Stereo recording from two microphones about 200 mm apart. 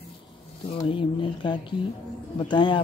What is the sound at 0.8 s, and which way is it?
A woman's voice, 25° left (ahead or behind).